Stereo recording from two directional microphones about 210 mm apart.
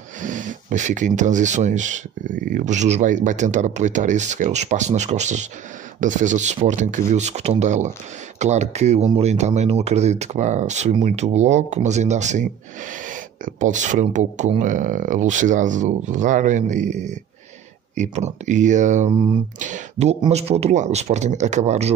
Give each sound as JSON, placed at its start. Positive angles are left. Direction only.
{"t": 0.2, "sound": "speech", "side_deg": -35}